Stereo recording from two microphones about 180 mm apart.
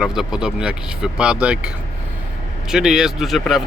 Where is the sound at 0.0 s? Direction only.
5° right (ahead or behind).